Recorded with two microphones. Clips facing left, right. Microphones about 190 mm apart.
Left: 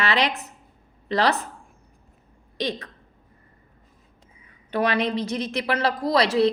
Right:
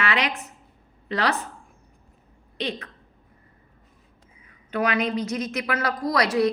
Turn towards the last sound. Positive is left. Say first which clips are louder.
# left 2 dB
turn(degrees=25)  # may be behind; listen again after turning